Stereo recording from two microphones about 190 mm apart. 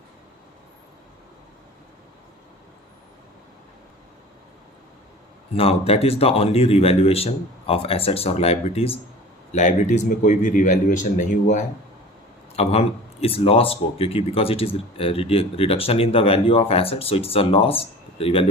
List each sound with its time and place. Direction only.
5.5 s a man's voice: 30° left (ahead or behind)